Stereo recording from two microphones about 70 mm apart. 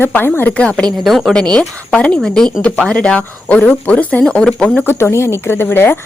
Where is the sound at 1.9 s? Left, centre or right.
Centre.